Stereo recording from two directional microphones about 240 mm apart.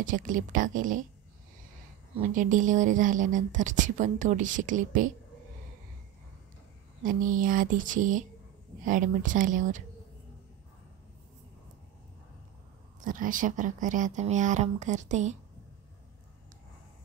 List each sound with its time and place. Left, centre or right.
0.0 s a woman's voice: right
2.2 s a woman's voice: right
7.0 s a woman's voice: right
13.0 s a woman's voice: right